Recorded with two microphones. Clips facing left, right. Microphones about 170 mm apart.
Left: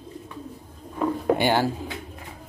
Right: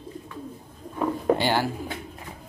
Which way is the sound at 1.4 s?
15° left (ahead or behind).